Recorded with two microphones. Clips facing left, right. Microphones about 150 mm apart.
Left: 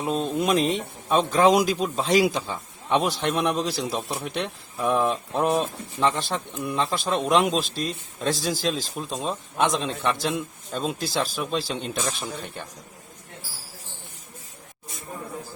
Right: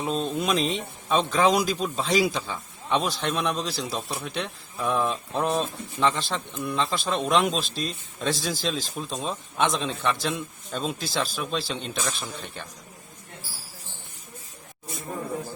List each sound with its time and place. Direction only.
0.0 s a man's voice: 10° left (ahead or behind)